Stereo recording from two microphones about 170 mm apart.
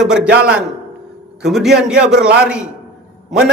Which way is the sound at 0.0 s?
5° right (ahead or behind).